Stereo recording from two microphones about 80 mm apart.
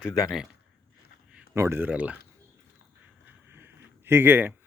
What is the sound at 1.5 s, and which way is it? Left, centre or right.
Speech, right.